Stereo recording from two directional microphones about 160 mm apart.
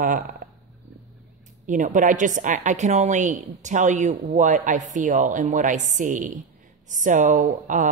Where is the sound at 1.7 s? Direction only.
55° right (ahead or behind).